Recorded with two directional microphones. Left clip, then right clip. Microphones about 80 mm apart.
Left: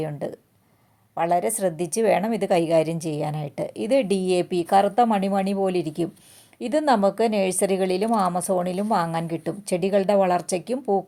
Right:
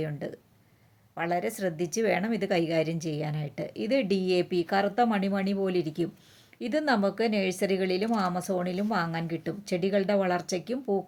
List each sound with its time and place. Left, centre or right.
0.0 s a woman's voice: left
8.0 s a woman's voice: left